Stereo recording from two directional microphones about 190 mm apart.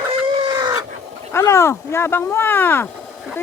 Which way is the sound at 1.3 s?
15° left (ahead or behind).